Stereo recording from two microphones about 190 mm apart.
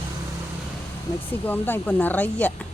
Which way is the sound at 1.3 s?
10° left (ahead or behind).